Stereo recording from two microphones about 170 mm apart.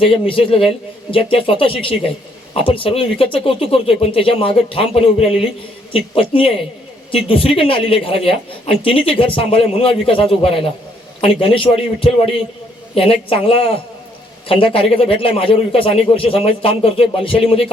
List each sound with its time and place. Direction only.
0.0 s a woman's voice: 30° left (ahead or behind)